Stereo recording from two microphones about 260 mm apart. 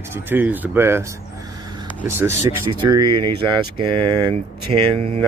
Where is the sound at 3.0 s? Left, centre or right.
Right.